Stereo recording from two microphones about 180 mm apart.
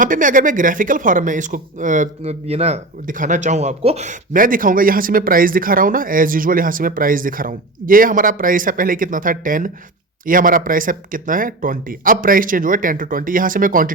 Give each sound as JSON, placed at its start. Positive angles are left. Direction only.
{"t": 0.0, "sound": "speech", "side_deg": -45}